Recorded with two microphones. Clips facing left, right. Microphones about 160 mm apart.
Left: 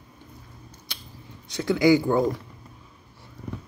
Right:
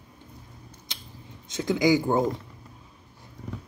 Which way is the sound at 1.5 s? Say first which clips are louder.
Left 3 dB; 15° right (ahead or behind).